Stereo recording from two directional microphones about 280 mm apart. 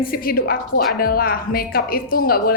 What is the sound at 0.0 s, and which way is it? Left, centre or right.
Speech, left.